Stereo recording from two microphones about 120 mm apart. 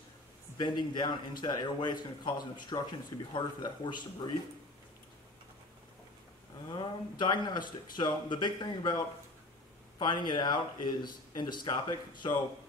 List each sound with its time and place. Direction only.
0.6 s a man's voice: 40° left (ahead or behind)
6.7 s a man's voice: 40° left (ahead or behind)